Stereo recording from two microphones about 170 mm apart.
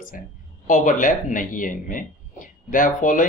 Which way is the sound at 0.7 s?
50° left (ahead or behind).